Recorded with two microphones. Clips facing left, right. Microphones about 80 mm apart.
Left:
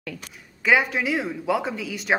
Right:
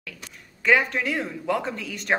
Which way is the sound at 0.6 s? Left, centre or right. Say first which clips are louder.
Left 1 dB; centre.